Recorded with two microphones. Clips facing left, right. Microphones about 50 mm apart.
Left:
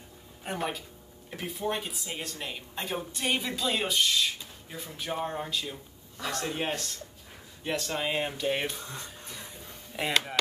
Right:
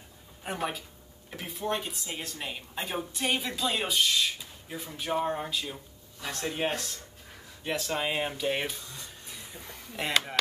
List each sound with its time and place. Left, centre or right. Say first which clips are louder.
0.4 s speech: even; centre
8.8 s speech: left 4 dB; left
9.9 s speech: even; centre